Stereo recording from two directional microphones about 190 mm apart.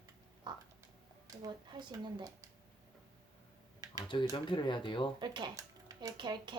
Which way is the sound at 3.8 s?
20° right (ahead or behind).